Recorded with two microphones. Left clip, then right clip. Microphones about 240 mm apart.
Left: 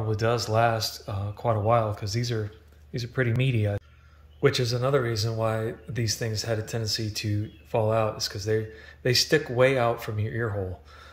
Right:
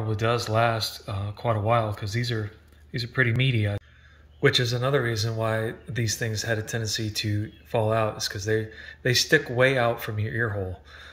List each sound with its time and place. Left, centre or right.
0.1 s speech: centre
0.7 s speech: left
1.0 s speech: centre